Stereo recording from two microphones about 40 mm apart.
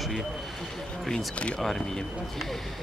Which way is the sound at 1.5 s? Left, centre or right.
Centre.